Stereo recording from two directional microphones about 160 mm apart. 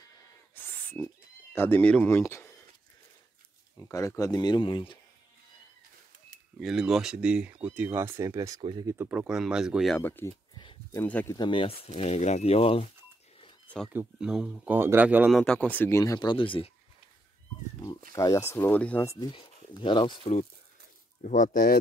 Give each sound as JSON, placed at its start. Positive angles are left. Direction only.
{"t": 0.6, "sound": "a sound", "side_deg": 10}
{"t": 3.8, "sound": "speech", "side_deg": 15}
{"t": 6.6, "sound": "speech", "side_deg": 0}
{"t": 8.9, "sound": "speech", "side_deg": -10}
{"t": 9.9, "sound": "speech", "side_deg": 15}
{"t": 10.5, "sound": "a sound", "side_deg": 30}
{"t": 11.0, "sound": "speech", "side_deg": 15}
{"t": 11.3, "sound": "speech", "side_deg": 30}
{"t": 13.8, "sound": "speech", "side_deg": -5}
{"t": 15.3, "sound": "speech", "side_deg": 5}
{"t": 18.1, "sound": "speech", "side_deg": 20}
{"t": 21.2, "sound": "speech", "side_deg": 50}